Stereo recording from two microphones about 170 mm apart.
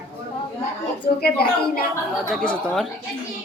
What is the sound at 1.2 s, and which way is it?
Speech, 60° left (ahead or behind).